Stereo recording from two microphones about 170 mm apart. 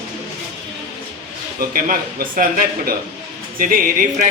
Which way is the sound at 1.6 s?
55° right (ahead or behind).